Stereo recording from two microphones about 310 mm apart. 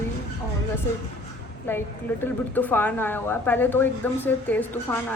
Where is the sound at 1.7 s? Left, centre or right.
Centre.